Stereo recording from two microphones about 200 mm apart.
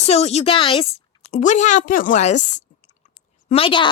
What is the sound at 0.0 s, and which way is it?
A woman's voice, 30° left (ahead or behind).